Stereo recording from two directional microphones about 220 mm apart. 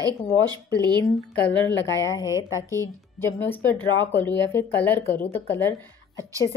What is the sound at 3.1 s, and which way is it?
A woman's voice, 10° left (ahead or behind).